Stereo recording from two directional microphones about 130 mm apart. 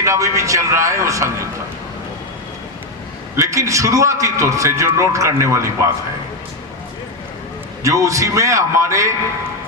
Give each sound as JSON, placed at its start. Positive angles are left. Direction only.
{"t": 0.0, "sound": "a man's voice", "side_deg": -25}
{"t": 3.3, "sound": "a man's voice", "side_deg": -25}
{"t": 7.9, "sound": "a man's voice", "side_deg": -25}